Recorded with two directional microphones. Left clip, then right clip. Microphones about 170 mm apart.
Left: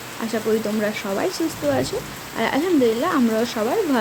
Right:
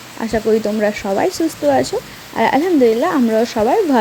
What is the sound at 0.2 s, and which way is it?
Speech, 30° right (ahead or behind).